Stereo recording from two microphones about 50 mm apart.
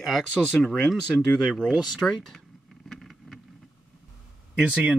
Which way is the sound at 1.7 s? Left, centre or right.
Right.